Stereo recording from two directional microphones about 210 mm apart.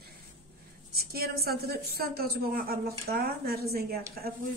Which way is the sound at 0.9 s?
45° right (ahead or behind).